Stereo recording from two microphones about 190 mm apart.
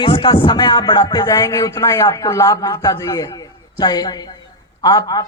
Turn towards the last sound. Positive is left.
turn(degrees=20)  # may be behind; listen again after turning